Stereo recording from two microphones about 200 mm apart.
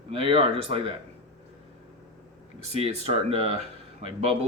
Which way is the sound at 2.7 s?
30° right (ahead or behind).